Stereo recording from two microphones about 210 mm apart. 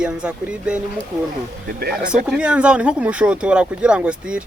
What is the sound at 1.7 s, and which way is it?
Speech, 50° right (ahead or behind).